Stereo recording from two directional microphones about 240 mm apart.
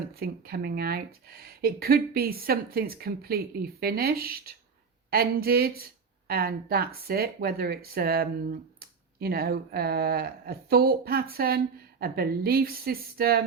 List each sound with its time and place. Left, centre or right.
0.2 s speech: right